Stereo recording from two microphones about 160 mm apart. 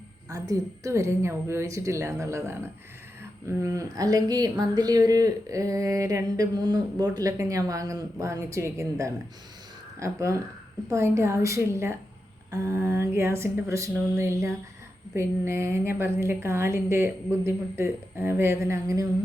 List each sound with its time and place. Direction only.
0.3 s speech: 20° right (ahead or behind)
3.6 s a woman's voice: 20° right (ahead or behind)